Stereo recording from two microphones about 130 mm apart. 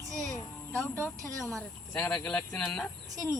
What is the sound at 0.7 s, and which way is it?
Speech, 10° left (ahead or behind).